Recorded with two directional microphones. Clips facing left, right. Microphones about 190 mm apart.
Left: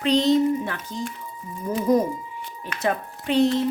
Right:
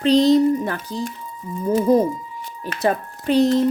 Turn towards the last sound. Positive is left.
turn(degrees=-40)  # may be behind; listen again after turning